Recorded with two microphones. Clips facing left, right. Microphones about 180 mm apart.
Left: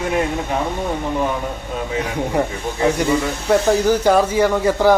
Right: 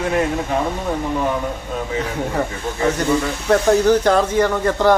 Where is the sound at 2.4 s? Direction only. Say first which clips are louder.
Left 3 dB; 20° left (ahead or behind).